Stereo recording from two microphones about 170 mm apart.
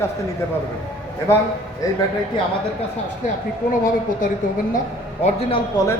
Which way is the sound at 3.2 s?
50° left (ahead or behind).